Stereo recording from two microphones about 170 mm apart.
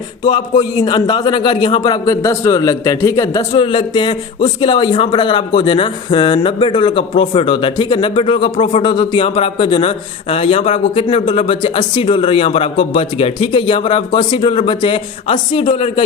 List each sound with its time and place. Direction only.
0.3 s a man's voice: 25° left (ahead or behind)
3.5 s a man's voice: 30° left (ahead or behind)